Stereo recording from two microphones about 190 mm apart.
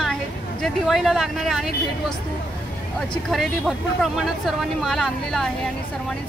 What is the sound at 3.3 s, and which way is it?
Speech, centre (ahead or behind).